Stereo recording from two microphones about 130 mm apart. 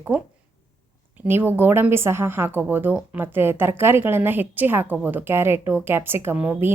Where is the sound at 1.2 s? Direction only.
15° right (ahead or behind).